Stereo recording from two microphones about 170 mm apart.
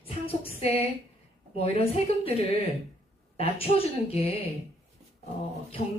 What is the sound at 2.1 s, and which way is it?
Speech, 35° left (ahead or behind).